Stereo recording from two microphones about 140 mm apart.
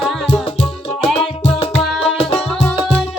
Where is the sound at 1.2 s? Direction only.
45° left (ahead or behind).